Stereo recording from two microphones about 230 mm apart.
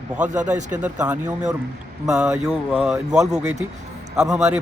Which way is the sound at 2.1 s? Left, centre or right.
Centre.